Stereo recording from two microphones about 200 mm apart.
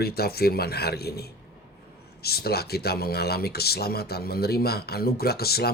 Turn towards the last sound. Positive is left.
turn(degrees=50)  # may be behind; listen again after turning